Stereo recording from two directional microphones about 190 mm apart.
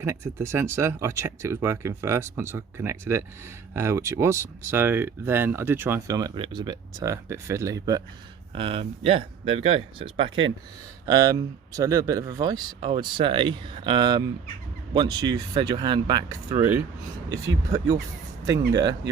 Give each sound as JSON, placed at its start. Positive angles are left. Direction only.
{"t": 0.0, "sound": "speech", "side_deg": -15}